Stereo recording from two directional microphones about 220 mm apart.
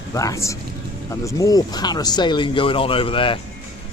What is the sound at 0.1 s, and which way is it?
A man's voice, 15° left (ahead or behind).